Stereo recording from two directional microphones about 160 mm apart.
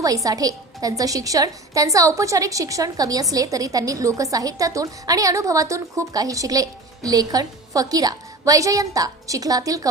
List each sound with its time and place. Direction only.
0.0 s a woman's voice: 20° right (ahead or behind)